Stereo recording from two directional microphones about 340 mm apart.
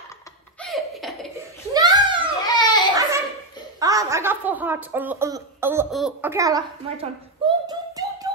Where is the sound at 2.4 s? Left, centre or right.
Centre.